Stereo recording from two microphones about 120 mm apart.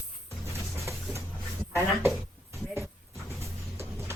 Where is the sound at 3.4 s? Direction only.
25° right (ahead or behind).